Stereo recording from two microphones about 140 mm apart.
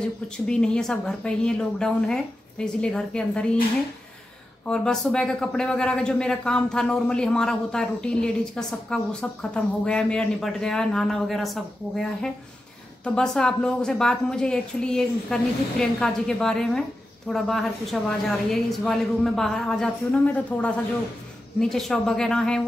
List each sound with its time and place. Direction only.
0.0 s speech: 5° left (ahead or behind)
4.6 s speech: 5° left (ahead or behind)